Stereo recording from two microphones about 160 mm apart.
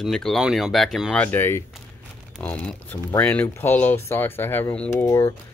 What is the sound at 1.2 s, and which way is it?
Speech, 10° left (ahead or behind).